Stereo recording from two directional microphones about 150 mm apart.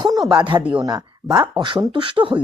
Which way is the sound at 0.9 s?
25° right (ahead or behind).